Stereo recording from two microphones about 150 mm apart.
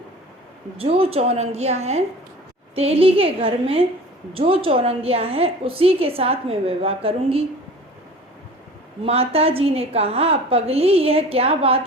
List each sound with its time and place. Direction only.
0.8 s a woman's voice: 40° right (ahead or behind)
9.0 s a woman's voice: 40° right (ahead or behind)